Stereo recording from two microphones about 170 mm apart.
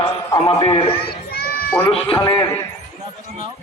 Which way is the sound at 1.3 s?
65° left (ahead or behind).